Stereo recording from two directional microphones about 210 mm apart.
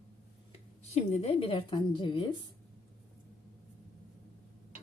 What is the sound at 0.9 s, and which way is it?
A woman's voice, 30° left (ahead or behind).